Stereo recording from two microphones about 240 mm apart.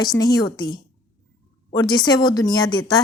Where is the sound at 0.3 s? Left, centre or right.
Centre.